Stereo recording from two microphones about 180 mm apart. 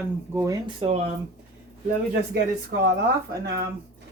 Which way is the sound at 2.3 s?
65° right (ahead or behind).